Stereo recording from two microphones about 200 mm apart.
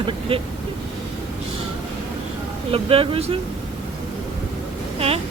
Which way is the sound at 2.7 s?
30° right (ahead or behind).